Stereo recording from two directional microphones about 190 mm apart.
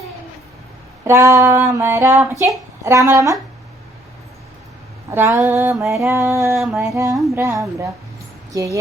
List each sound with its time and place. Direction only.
1.0 s child singing: 15° right (ahead or behind)
5.4 s child singing: 10° right (ahead or behind)